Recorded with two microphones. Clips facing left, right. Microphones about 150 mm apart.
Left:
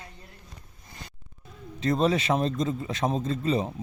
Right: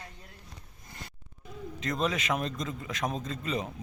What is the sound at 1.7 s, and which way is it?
A man's voice, 30° left (ahead or behind).